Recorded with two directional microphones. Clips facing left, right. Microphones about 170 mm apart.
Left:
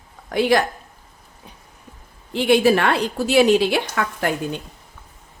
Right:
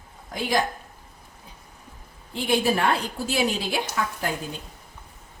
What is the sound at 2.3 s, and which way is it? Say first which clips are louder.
A woman's voice: left 7 dB; 80° left.